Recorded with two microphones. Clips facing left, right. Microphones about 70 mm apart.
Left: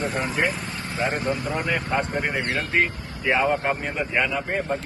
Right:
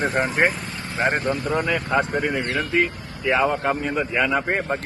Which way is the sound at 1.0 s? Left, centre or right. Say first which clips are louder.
Right 4 dB; right.